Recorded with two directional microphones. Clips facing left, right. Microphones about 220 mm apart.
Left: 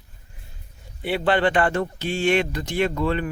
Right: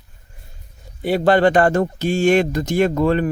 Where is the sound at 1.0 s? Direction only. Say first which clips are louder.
Right 6 dB; 40° right (ahead or behind).